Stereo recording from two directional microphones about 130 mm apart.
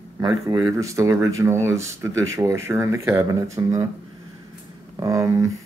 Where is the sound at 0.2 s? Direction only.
30° right (ahead or behind).